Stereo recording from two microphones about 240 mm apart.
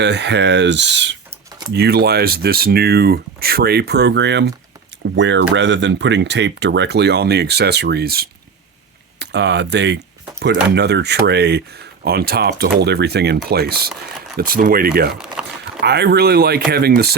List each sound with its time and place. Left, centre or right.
0.0 s speech: right
15.1 s a sound: centre
15.8 s speech: right